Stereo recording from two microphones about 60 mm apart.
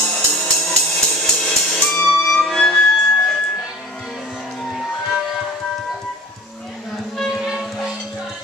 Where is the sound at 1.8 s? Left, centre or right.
Centre.